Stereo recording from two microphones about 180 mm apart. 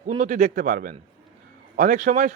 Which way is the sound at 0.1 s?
45° right (ahead or behind).